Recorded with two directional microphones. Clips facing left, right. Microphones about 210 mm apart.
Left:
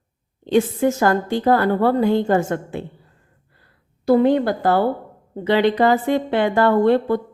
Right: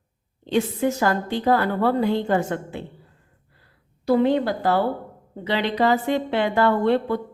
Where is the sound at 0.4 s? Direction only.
45° left (ahead or behind).